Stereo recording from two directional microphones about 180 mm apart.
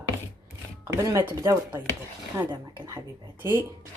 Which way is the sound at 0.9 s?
20° right (ahead or behind).